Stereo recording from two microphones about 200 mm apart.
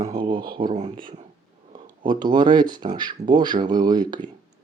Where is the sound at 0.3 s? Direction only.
45° right (ahead or behind).